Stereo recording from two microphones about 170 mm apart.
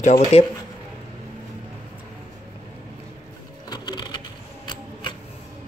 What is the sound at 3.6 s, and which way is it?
Sewing machine, 25° left (ahead or behind).